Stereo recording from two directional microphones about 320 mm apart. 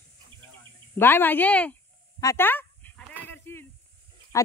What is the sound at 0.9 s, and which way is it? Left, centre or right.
Speech, centre.